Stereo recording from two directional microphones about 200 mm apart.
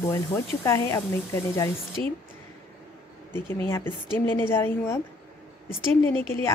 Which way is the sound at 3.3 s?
10° left (ahead or behind).